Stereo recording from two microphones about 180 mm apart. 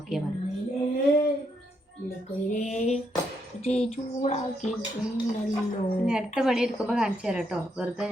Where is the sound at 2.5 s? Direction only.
40° left (ahead or behind).